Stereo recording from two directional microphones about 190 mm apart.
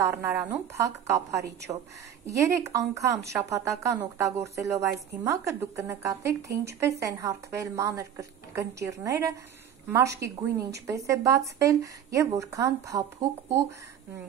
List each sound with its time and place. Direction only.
0.0 s a woman's voice: 15° right (ahead or behind)